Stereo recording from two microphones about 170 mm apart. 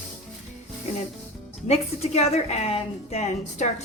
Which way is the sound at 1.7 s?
40° left (ahead or behind).